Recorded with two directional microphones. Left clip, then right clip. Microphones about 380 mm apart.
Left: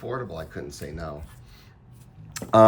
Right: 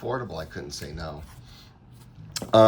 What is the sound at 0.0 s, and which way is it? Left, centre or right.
Speech, centre.